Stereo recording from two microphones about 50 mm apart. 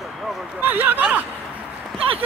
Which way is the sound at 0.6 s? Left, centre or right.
Right.